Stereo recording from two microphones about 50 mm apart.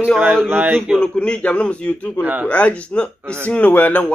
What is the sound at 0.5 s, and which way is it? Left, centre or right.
Speech, right.